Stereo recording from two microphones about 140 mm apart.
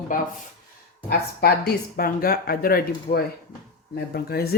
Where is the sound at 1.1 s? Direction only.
90° left.